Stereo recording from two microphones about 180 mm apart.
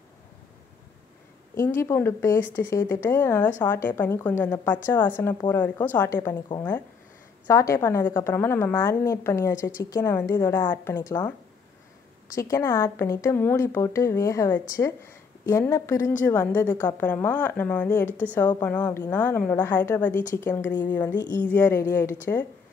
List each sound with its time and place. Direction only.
1.8 s speech: 15° left (ahead or behind)
7.4 s a woman's voice: 15° left (ahead or behind)
12.4 s speech: 15° left (ahead or behind)